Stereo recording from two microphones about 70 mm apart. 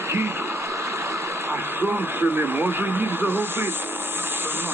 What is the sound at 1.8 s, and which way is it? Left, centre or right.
Speech, right.